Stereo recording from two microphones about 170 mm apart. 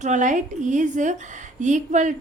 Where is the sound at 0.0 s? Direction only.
45° right (ahead or behind).